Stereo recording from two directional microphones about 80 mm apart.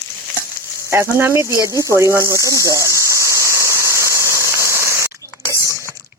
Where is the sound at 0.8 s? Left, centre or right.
Right.